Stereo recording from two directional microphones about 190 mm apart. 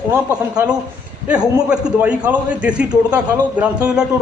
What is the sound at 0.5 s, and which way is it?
A man's voice, 5° right (ahead or behind).